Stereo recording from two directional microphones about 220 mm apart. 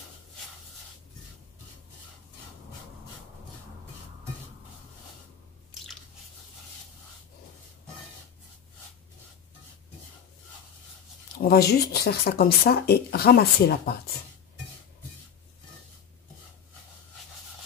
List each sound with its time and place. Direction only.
11.3 s speech: 45° left (ahead or behind)